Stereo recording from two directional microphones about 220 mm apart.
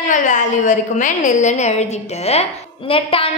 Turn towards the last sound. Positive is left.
turn(degrees=25)  # may be behind; listen again after turning